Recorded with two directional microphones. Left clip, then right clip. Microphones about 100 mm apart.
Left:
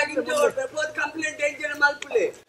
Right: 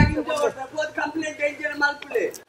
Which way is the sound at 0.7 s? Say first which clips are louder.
Right 1 dB; 35° right (ahead or behind).